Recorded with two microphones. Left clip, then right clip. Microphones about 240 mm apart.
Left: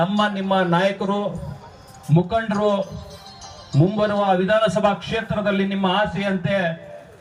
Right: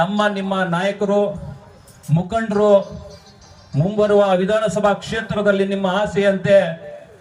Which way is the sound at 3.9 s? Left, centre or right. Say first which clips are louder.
Right 6 dB; right.